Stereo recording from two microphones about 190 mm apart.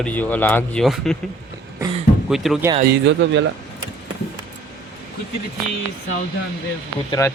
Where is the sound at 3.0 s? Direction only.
70° right (ahead or behind).